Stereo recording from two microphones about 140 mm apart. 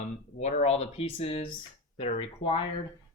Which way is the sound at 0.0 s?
55° left (ahead or behind).